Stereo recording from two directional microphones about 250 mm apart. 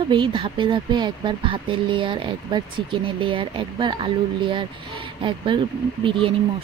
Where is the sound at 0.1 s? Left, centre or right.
Centre.